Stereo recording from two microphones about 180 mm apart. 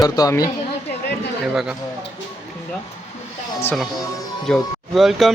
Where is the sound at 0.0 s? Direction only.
20° left (ahead or behind).